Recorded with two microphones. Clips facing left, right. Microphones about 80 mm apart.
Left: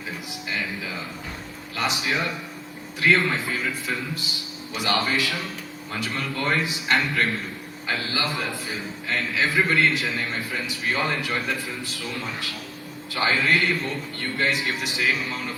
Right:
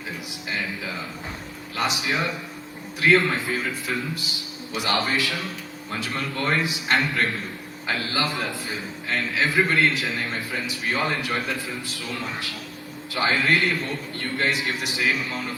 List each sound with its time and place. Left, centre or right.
1.7 s a man's voice: right
8.1 s a man's voice: right
13.1 s a man's voice: right